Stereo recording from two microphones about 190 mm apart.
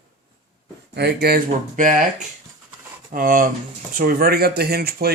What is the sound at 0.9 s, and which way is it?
Speech, 55° right (ahead or behind).